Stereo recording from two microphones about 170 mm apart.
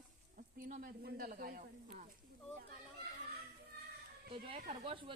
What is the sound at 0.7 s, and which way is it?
Speech, 55° right (ahead or behind).